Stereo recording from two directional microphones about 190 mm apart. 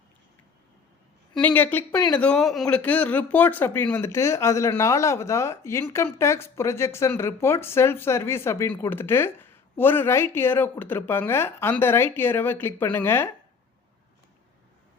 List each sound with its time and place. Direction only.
1.4 s speech: 10° left (ahead or behind)